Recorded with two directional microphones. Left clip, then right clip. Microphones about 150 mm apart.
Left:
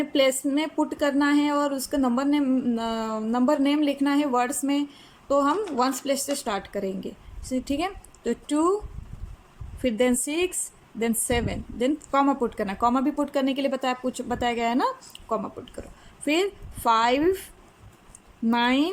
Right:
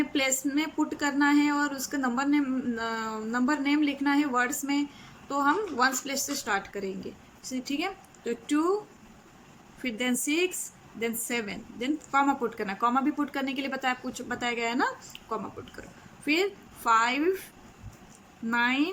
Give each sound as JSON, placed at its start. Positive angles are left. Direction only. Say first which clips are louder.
{"t": 0.0, "sound": "speech", "louder": "left 6 dB", "side_deg": 25}
{"t": 9.8, "sound": "speech", "louder": "left 7 dB", "side_deg": 25}
{"t": 18.4, "sound": "speech", "louder": "left 3 dB", "side_deg": 30}